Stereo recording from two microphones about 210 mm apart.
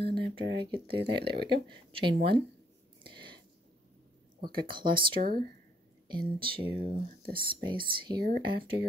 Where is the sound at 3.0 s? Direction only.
25° right (ahead or behind).